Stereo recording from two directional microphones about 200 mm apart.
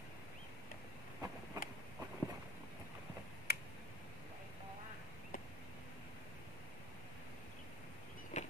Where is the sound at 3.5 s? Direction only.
50° left (ahead or behind).